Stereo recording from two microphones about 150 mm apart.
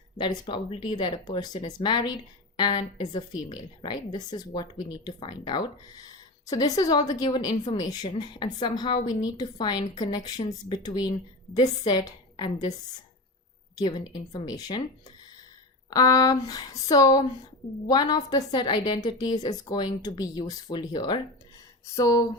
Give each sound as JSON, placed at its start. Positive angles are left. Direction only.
{"t": 0.2, "sound": "a woman's voice", "side_deg": 30}
{"t": 15.9, "sound": "a woman's voice", "side_deg": 25}